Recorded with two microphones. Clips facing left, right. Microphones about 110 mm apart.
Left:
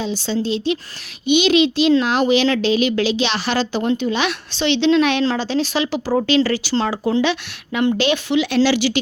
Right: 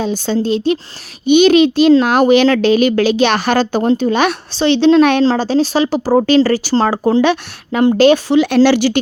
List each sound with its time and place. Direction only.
0.0 s a child's voice: 50° right (ahead or behind)